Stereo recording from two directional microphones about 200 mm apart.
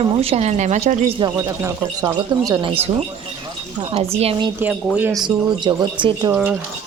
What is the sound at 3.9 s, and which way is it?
Speech, 30° right (ahead or behind).